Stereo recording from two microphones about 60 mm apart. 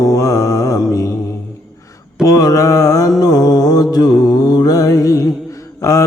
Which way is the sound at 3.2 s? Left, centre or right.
Left.